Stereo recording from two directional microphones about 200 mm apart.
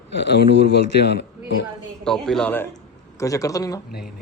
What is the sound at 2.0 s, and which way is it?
A man's voice, centre (ahead or behind).